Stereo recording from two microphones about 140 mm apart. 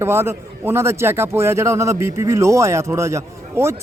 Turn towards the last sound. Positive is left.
turn(degrees=-20)  # may be behind; listen again after turning